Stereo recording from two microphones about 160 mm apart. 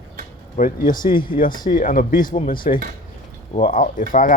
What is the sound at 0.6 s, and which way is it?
Speech, 60° left (ahead or behind).